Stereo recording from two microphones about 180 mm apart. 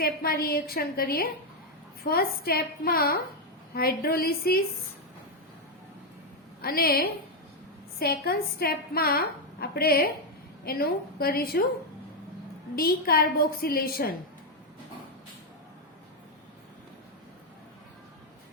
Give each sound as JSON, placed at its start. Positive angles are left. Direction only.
{"t": 0.0, "sound": "a woman's voice", "side_deg": 55}
{"t": 6.6, "sound": "a woman's voice", "side_deg": 55}
{"t": 12.7, "sound": "a woman's voice", "side_deg": 55}